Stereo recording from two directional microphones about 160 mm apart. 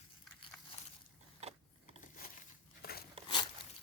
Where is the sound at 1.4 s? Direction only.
40° right (ahead or behind).